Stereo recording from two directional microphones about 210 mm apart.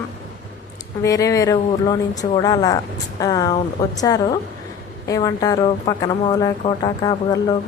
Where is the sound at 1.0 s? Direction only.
15° left (ahead or behind).